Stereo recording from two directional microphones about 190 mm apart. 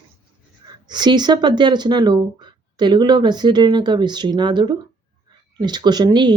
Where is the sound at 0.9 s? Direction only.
25° right (ahead or behind).